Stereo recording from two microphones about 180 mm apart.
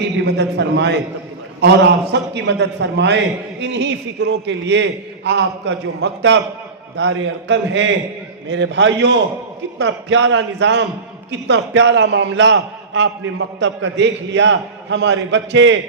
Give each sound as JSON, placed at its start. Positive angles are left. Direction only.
{"t": 0.3, "sound": "a man's voice", "side_deg": -70}